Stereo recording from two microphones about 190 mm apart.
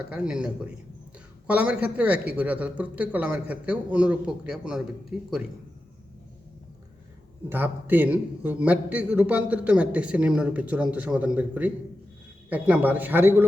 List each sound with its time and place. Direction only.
0.0 s a man's voice: 5° right (ahead or behind)
7.5 s a man's voice: 10° right (ahead or behind)